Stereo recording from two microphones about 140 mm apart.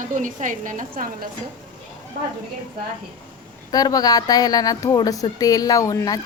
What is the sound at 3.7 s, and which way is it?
Speech, 25° left (ahead or behind).